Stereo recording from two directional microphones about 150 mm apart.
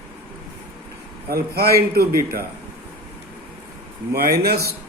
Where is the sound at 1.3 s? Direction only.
90° right.